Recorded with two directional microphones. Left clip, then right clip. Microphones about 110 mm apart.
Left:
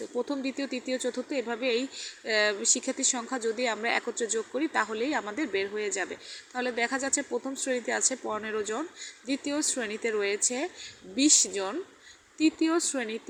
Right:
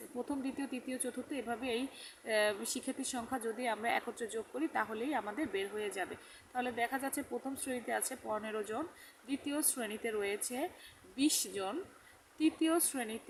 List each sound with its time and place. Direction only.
0.3 s speech: 25° left (ahead or behind)